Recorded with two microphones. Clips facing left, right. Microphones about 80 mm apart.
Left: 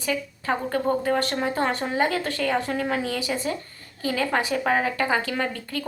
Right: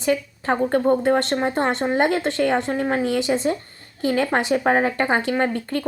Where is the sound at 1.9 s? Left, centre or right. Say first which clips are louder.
Right 4 dB; right.